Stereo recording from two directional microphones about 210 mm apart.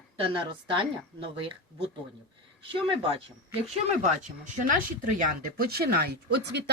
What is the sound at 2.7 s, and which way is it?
Speech, 25° right (ahead or behind).